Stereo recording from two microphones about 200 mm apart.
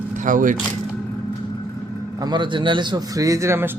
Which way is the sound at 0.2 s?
40° right (ahead or behind).